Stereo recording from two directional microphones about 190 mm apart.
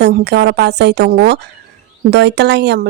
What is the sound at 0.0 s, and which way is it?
Speech, 60° right (ahead or behind).